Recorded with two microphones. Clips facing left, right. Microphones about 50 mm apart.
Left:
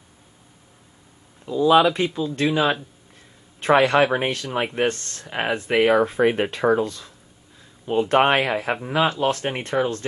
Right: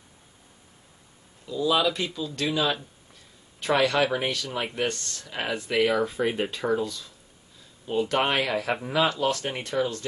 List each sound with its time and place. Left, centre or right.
1.4 s speech: left